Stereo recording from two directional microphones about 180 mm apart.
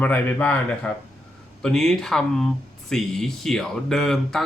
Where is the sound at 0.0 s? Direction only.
10° left (ahead or behind).